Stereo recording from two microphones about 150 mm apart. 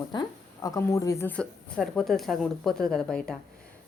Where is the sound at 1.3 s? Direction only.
5° left (ahead or behind).